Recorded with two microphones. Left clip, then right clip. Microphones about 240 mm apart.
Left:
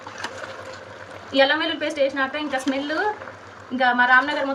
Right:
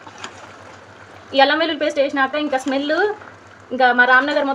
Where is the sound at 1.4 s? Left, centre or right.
Right.